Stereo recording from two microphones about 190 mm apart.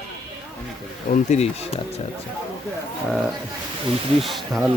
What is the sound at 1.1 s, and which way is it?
Speech, 35° left (ahead or behind).